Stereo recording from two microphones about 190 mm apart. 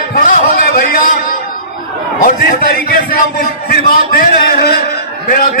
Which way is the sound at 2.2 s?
45° left (ahead or behind).